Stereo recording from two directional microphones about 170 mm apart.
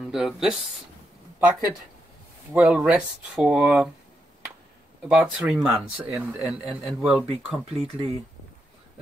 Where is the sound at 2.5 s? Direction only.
5° right (ahead or behind).